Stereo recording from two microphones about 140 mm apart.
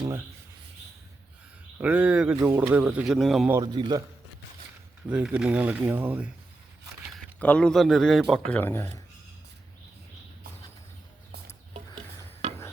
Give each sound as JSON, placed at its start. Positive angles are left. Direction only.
{"t": 1.8, "sound": "speech", "side_deg": -10}
{"t": 3.5, "sound": "a man's voice", "side_deg": -30}
{"t": 5.0, "sound": "speech", "side_deg": -10}
{"t": 7.1, "sound": "speech", "side_deg": 10}
{"t": 8.4, "sound": "speech", "side_deg": 15}
{"t": 12.4, "sound": "a sound", "side_deg": -55}